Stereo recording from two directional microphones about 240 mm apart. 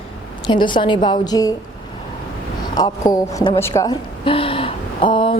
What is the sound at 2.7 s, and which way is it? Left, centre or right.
A woman's voice, centre.